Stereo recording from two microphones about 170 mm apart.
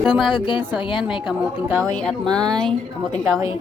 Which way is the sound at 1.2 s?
10° right (ahead or behind).